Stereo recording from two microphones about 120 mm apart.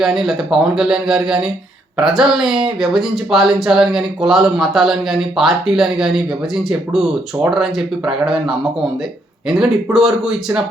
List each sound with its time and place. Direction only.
0.0 s speech: centre (ahead or behind)